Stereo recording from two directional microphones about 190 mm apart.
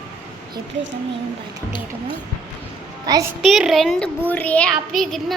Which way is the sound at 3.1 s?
20° right (ahead or behind).